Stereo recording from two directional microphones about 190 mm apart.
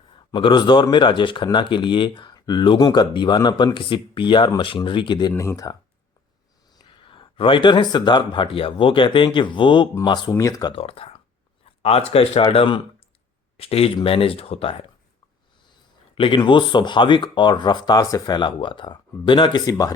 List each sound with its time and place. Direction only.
0.3 s speech: 25° left (ahead or behind)
6.7 s speech: 25° left (ahead or behind)